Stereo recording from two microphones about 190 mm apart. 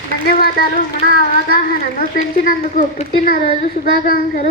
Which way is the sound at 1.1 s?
45° left (ahead or behind).